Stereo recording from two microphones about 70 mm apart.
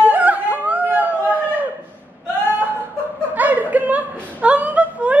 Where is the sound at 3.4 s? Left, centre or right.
Right.